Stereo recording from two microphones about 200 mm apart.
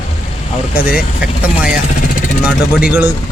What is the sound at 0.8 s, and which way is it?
Speech, 50° left (ahead or behind).